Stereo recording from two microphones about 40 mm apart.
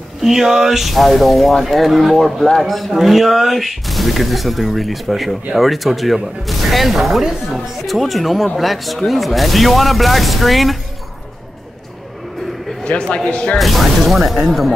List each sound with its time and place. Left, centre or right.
0.2 s speech: centre
12.8 s a man's voice: left
13.6 s speech: centre